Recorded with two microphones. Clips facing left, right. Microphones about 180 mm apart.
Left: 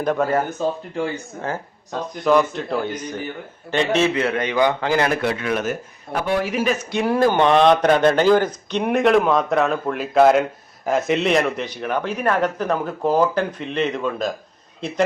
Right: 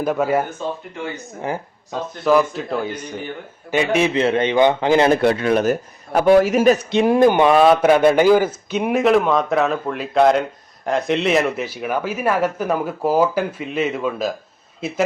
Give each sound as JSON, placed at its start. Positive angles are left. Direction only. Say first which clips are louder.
{"t": 0.0, "sound": "speech", "louder": "right 1 dB", "side_deg": -5}
{"t": 1.9, "sound": "a man's voice", "louder": "right 1 dB", "side_deg": -5}
{"t": 4.1, "sound": "a man's voice", "louder": "right 4 dB", "side_deg": -25}
{"t": 6.9, "sound": "a man's voice", "louder": "right 4 dB", "side_deg": -20}